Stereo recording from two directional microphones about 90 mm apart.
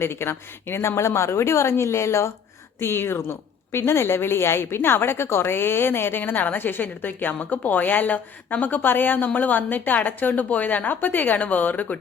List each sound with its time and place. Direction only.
0.0 s a woman's voice: 25° left (ahead or behind)